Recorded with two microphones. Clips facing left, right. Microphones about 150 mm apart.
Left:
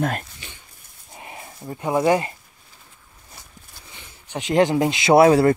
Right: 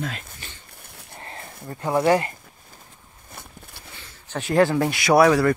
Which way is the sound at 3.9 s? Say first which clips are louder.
Even; 15° left (ahead or behind).